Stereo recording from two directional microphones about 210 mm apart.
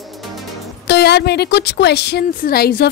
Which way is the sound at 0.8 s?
50° left (ahead or behind).